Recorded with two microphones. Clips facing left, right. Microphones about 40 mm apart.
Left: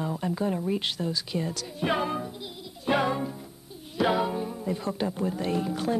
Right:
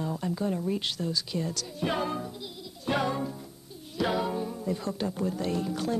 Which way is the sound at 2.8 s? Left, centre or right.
Centre.